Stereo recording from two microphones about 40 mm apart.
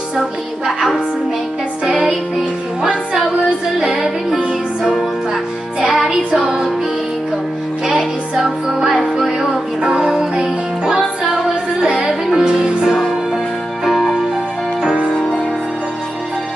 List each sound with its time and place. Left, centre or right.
1.9 s music: centre
6.0 s music: centre
7.8 s music: centre